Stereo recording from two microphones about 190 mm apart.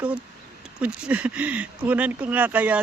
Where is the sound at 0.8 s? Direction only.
5° right (ahead or behind).